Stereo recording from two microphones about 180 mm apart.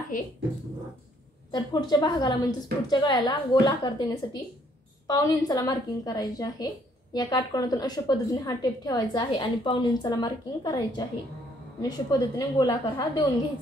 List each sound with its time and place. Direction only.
0.1 s speech: 50° left (ahead or behind)
1.5 s a woman's voice: 25° left (ahead or behind)
12.1 s a woman's voice: 20° left (ahead or behind)